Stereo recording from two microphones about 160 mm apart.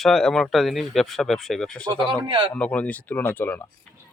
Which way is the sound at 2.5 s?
10° left (ahead or behind).